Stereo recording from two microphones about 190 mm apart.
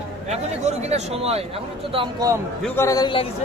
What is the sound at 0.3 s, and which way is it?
Speech, 35° right (ahead or behind).